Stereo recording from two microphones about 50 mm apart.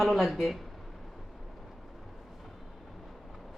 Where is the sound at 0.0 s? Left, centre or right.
Centre.